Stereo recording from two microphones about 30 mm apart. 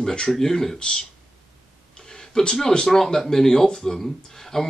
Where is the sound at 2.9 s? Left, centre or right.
Centre.